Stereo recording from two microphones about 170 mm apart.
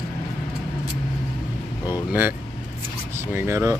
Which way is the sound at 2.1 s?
10° right (ahead or behind).